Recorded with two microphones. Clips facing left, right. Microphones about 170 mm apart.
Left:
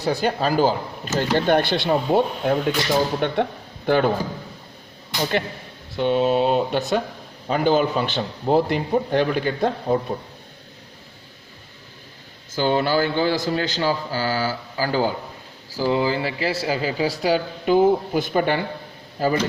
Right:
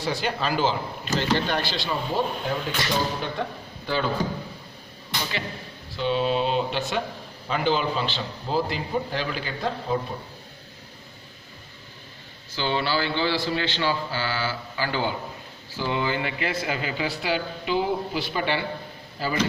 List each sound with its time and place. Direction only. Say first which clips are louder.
0.0 s a man's voice: left 5 dB; 40° left (ahead or behind); by 4.1 s 55° left (ahead or behind)
6.0 s a man's voice: left 5 dB; 50° left (ahead or behind)
12.5 s a man's voice: left 6 dB; 45° left (ahead or behind)